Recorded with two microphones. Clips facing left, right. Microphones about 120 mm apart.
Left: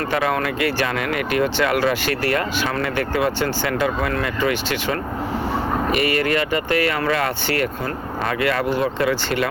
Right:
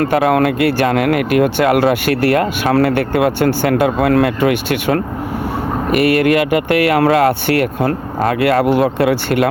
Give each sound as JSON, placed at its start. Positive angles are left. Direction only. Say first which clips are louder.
{"t": 0.0, "sound": "speech", "louder": "right 8 dB", "side_deg": -60}